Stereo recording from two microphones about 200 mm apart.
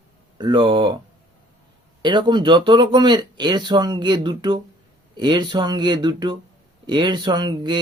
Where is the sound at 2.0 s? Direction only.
25° right (ahead or behind).